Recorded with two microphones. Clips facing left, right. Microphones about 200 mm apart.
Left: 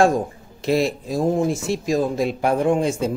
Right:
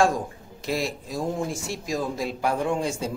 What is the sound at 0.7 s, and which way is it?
Speech, 25° left (ahead or behind).